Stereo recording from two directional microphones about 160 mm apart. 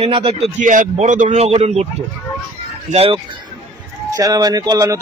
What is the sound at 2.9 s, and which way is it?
Speech, 35° right (ahead or behind).